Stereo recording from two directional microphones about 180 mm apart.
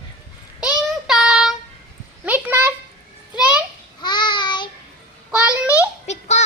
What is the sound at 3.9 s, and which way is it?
Child singing, 25° left (ahead or behind).